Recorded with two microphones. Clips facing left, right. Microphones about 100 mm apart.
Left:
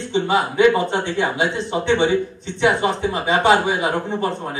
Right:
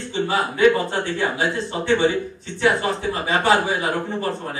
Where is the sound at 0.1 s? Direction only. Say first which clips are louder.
Left 3 dB; 20° left (ahead or behind).